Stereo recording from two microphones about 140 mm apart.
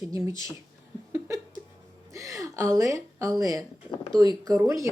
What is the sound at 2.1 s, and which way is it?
Speech, 25° right (ahead or behind).